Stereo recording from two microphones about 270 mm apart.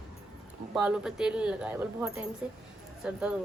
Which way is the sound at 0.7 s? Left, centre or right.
Centre.